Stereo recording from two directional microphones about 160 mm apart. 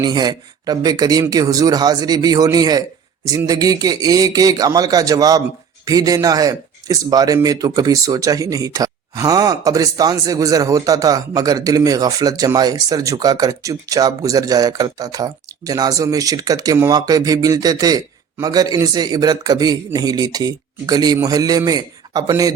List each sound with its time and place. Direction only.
0.0 s speech: 25° right (ahead or behind)